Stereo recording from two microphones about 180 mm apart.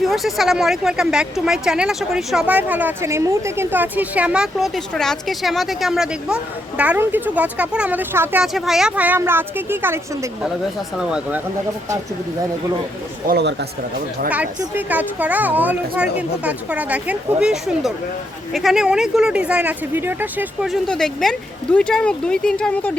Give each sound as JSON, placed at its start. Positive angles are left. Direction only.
{"t": 0.0, "sound": "speech", "side_deg": 0}
{"t": 13.2, "sound": "speech", "side_deg": -70}
{"t": 14.3, "sound": "speech", "side_deg": -10}